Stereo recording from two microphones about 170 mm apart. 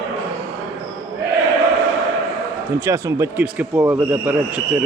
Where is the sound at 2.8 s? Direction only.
15° right (ahead or behind).